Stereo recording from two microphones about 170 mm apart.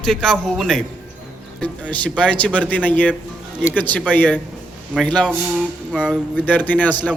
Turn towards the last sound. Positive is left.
turn(degrees=10)  # may be behind; listen again after turning